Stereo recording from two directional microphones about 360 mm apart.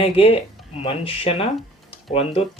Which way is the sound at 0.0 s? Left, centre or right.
Centre.